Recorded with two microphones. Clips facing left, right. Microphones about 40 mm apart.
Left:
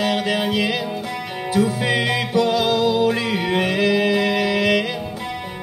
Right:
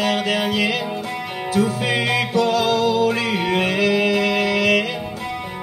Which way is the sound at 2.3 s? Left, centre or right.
Centre.